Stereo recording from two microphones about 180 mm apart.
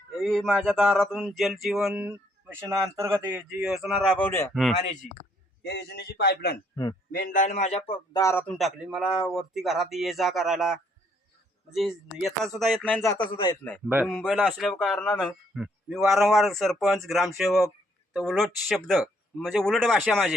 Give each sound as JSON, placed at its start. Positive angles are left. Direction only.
{"t": 0.2, "sound": "a man's voice", "side_deg": 5}
{"t": 3.3, "sound": "a man's voice", "side_deg": 0}
{"t": 5.6, "sound": "a man's voice", "side_deg": 65}
{"t": 7.1, "sound": "a man's voice", "side_deg": 50}
{"t": 8.1, "sound": "a man's voice", "side_deg": 15}
{"t": 8.5, "sound": "a man's voice", "side_deg": 0}
{"t": 13.8, "sound": "speech", "side_deg": -10}
{"t": 14.1, "sound": "a man's voice", "side_deg": 5}
{"t": 15.5, "sound": "a man's voice", "side_deg": 0}